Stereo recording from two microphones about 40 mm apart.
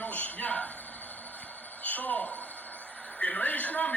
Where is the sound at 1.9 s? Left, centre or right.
Left.